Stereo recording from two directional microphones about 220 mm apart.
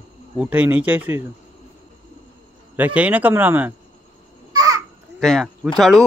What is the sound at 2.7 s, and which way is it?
Speech, 5° right (ahead or behind).